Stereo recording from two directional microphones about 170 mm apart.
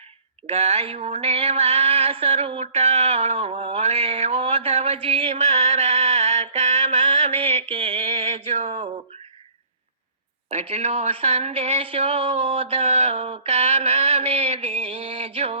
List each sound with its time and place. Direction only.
0.4 s mantra: 40° right (ahead or behind)
10.5 s speech: 40° right (ahead or behind)